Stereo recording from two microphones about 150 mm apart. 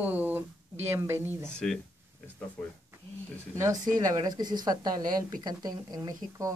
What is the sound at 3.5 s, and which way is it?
A woman's voice, 20° right (ahead or behind).